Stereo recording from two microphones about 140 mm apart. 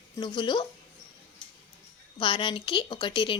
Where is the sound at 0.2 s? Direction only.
35° left (ahead or behind).